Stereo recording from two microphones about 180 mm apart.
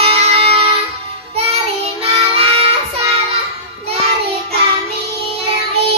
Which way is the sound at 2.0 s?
35° right (ahead or behind).